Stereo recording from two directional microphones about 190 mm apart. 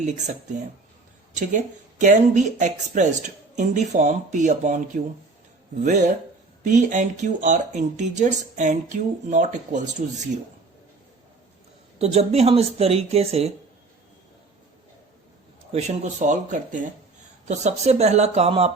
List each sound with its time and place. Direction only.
0.0 s speech: 40° right (ahead or behind)
1.4 s speech: 40° right (ahead or behind)
11.9 s speech: 35° right (ahead or behind)
15.7 s speech: 35° right (ahead or behind)